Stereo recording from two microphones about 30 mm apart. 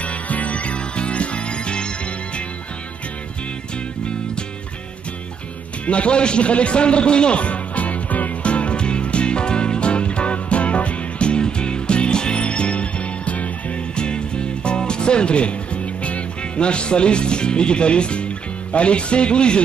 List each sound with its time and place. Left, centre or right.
0.0 s music: left
5.9 s a man's voice: left
8.5 s music: left
13.9 s music: left